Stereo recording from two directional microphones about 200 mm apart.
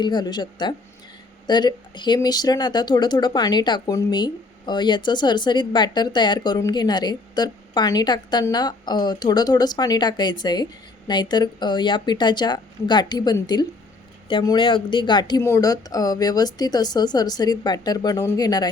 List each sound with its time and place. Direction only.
0.0 s speech: 20° left (ahead or behind)